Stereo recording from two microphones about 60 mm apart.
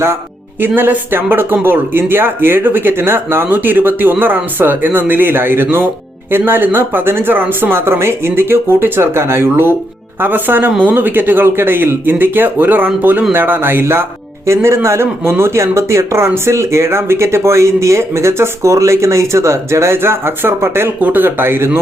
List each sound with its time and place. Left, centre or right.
0.8 s speech: right
21.0 s speech: right